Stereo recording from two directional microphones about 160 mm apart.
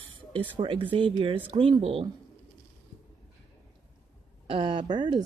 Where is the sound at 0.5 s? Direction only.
30° right (ahead or behind).